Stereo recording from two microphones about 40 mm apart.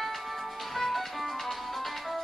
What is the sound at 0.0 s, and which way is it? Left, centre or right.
Music, centre.